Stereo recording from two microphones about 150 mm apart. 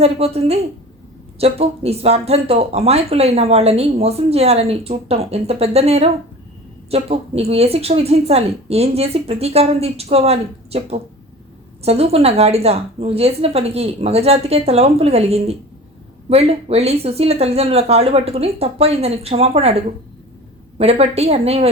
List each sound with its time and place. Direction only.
0.0 s speech: 40° right (ahead or behind)